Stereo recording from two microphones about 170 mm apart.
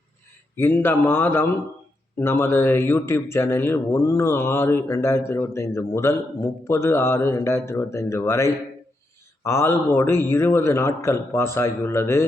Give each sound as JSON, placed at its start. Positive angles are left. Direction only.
{"t": 0.5, "sound": "a man's voice", "side_deg": 15}